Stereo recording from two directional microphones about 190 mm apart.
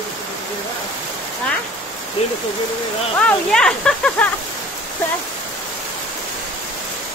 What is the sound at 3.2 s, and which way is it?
Speech, 5° left (ahead or behind).